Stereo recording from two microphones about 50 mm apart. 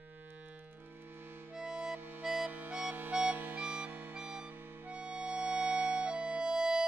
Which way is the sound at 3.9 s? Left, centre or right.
Right.